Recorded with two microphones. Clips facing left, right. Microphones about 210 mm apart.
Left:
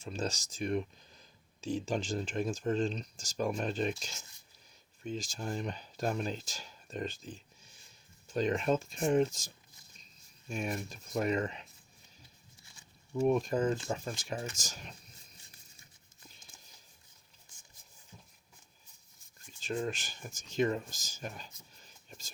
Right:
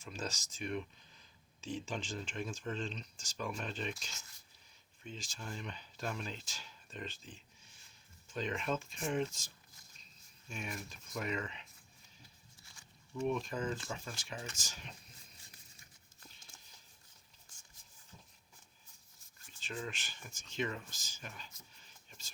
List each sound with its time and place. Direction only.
0.0 s speech: 30° left (ahead or behind)
4.1 s speech: 15° left (ahead or behind)
5.0 s speech: 45° left (ahead or behind)
10.5 s speech: 40° left (ahead or behind)
13.1 s speech: 45° left (ahead or behind)
19.5 s speech: 45° left (ahead or behind)
21.8 s whispering: 45° left (ahead or behind)